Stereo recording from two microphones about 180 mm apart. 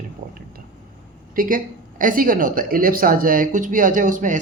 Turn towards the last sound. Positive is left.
turn(degrees=-45)  # may be behind; listen again after turning